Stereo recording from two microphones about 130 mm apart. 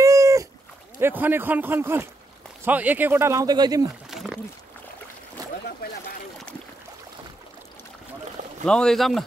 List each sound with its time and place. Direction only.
0.0 s cat: 25° right (ahead or behind)
0.9 s speech: 15° right (ahead or behind); by 3.8 s 30° right (ahead or behind)
4.1 s a sound: 5° right (ahead or behind)
5.4 s boat: 30° right (ahead or behind)
8.6 s speech: 5° left (ahead or behind)